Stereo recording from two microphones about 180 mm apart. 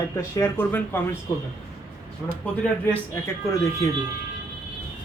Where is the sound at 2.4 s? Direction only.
5° left (ahead or behind).